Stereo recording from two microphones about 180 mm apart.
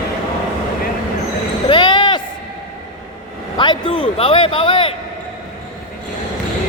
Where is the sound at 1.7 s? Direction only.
25° left (ahead or behind).